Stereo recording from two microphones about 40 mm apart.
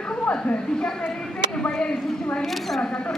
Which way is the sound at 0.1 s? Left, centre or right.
Left.